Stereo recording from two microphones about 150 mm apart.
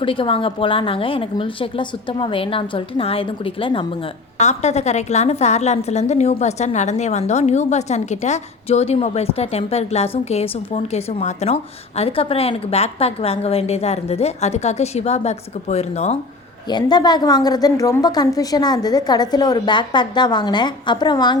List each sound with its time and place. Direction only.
0.0 s a woman's voice: 35° left (ahead or behind)
4.4 s a woman's voice: 50° left (ahead or behind)
10.8 s a woman's voice: 50° left (ahead or behind)
16.6 s a woman's voice: 30° left (ahead or behind)